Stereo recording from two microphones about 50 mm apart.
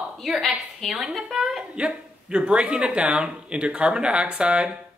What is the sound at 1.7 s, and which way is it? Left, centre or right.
Speech, right.